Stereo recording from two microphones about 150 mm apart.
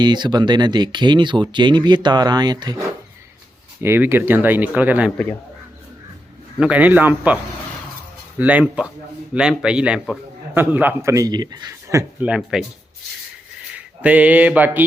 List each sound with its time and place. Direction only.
0.0 s speech: 30° right (ahead or behind)
3.8 s a man's voice: 15° right (ahead or behind)
6.6 s a man's voice: 10° right (ahead or behind)
8.4 s a man's voice: 10° right (ahead or behind)
12.2 s speech: 5° right (ahead or behind)
13.7 s a sound: 10° right (ahead or behind)